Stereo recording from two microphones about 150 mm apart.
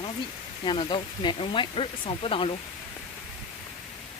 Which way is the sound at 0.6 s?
30° left (ahead or behind).